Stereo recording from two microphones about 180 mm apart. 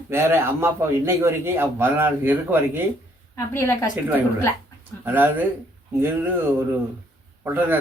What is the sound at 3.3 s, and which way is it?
Speech, 15° left (ahead or behind).